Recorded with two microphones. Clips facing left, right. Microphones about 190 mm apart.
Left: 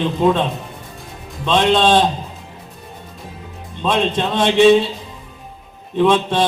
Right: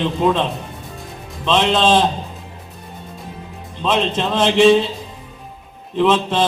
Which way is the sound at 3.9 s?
Centre (ahead or behind).